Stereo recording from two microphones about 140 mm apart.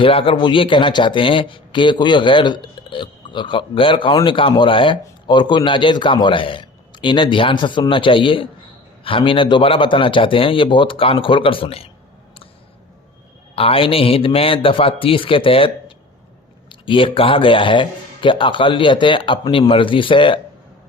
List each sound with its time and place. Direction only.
0.0 s speech: 40° left (ahead or behind)
13.6 s speech: 40° left (ahead or behind)